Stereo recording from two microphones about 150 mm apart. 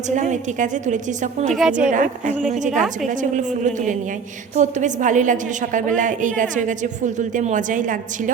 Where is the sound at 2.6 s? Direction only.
55° right (ahead or behind).